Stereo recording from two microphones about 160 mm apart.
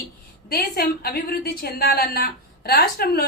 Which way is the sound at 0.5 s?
75° left (ahead or behind).